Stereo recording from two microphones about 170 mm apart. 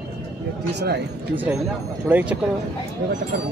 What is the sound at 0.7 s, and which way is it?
Speech, 75° right (ahead or behind).